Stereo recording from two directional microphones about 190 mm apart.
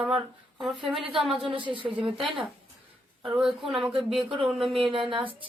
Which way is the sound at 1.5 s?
25° right (ahead or behind).